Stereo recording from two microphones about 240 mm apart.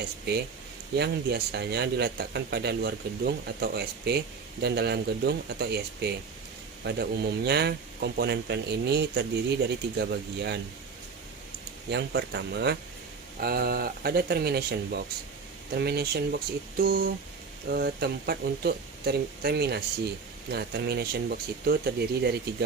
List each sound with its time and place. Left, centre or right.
0.9 s speech: right
11.9 s speech: right